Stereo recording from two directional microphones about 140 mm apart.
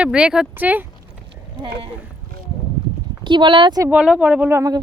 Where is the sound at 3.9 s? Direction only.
10° right (ahead or behind).